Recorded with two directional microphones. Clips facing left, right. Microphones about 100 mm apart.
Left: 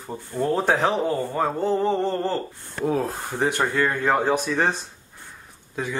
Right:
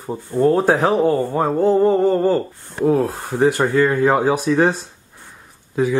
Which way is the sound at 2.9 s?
Centre (ahead or behind).